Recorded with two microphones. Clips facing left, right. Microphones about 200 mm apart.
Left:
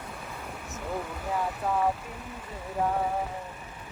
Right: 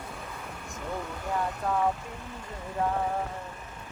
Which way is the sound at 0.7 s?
5° left (ahead or behind).